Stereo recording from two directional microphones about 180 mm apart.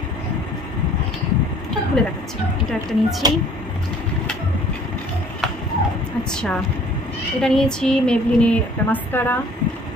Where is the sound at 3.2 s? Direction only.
20° right (ahead or behind).